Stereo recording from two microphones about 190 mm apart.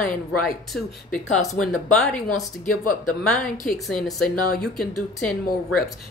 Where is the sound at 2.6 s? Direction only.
45° left (ahead or behind).